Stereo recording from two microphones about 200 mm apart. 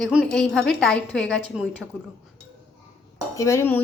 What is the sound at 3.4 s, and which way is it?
Speech, 15° left (ahead or behind).